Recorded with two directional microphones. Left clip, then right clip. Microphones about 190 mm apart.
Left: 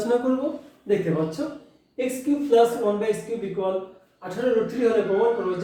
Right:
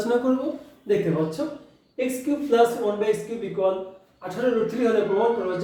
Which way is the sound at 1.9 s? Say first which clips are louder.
Left 1 dB; 15° left (ahead or behind).